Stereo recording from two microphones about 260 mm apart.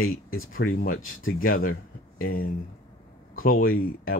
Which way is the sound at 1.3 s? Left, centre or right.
Left.